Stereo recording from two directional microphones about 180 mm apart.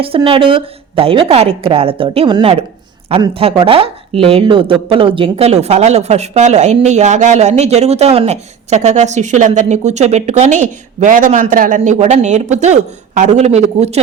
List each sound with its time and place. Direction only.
0.0 s speech: 30° right (ahead or behind)